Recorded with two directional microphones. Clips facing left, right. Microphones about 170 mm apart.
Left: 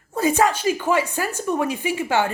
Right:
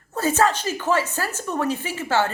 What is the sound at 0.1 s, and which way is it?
Speech, 15° left (ahead or behind).